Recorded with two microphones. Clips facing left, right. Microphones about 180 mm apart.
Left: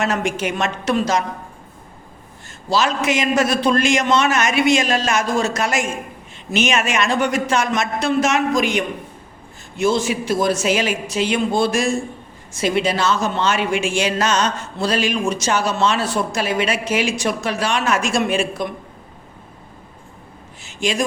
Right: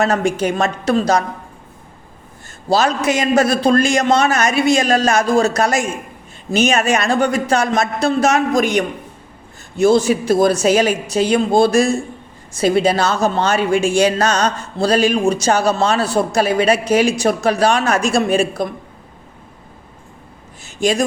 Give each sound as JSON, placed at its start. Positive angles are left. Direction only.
{"t": 0.0, "sound": "a woman's voice", "side_deg": -35}
{"t": 2.7, "sound": "a woman's voice", "side_deg": -35}